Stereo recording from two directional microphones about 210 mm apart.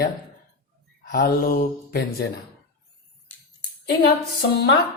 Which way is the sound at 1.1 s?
45° left (ahead or behind).